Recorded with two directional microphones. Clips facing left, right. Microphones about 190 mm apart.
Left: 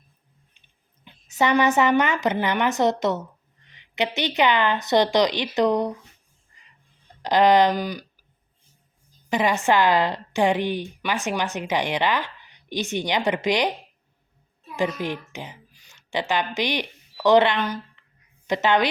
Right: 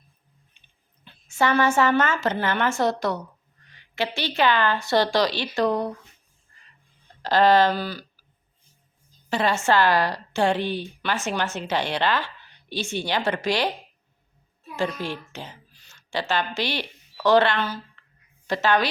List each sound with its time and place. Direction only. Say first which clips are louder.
1.0 s a woman's voice: left 1 dB; 20° left (ahead or behind)
7.2 s speech: left 1 dB; 20° left (ahead or behind)
9.3 s a woman's voice: left 1 dB; 15° left (ahead or behind)
14.8 s a woman's voice: left 2 dB; 15° left (ahead or behind)